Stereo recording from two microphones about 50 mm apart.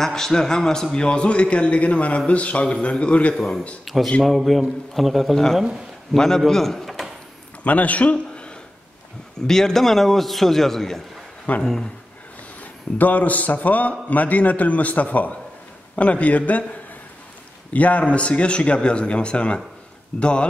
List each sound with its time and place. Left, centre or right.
0.0 s a man's voice: centre; by 3.3 s left
3.3 s a man's voice: centre
7.6 s a man's voice: left
9.5 s a man's voice: centre
11.5 s a man's voice: left
12.9 s a man's voice: left
17.7 s a man's voice: left